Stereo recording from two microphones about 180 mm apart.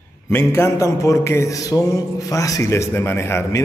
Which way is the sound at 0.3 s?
15° left (ahead or behind).